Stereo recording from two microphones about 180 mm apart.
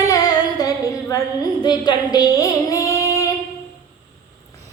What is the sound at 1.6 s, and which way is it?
Female singing, 25° left (ahead or behind).